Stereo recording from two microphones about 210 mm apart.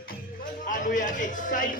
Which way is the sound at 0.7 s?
40° left (ahead or behind).